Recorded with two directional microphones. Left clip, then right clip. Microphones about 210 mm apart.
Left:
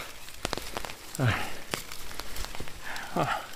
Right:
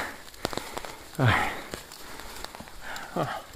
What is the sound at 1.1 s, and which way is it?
Speech, 15° right (ahead or behind).